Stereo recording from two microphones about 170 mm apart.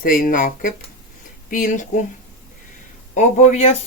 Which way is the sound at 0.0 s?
55° left (ahead or behind).